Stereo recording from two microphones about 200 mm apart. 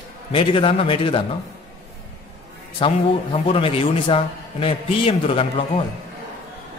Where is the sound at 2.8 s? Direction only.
25° left (ahead or behind).